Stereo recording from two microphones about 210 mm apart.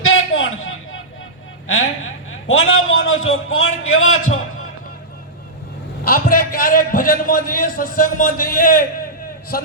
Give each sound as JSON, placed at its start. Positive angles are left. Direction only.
{"t": 0.0, "sound": "a sound", "side_deg": 70}
{"t": 1.6, "sound": "a man's voice", "side_deg": 75}
{"t": 6.1, "sound": "a man's voice", "side_deg": 45}